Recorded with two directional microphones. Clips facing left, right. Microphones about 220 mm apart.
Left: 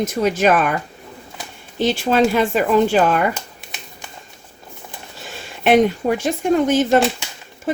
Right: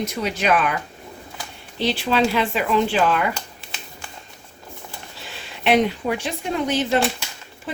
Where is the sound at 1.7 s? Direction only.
45° left (ahead or behind).